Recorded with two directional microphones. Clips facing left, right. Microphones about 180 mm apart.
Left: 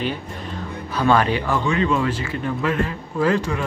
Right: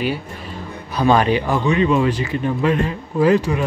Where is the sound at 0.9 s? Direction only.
15° right (ahead or behind).